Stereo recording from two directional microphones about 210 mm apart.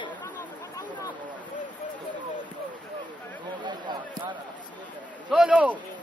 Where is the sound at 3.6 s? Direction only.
20° right (ahead or behind).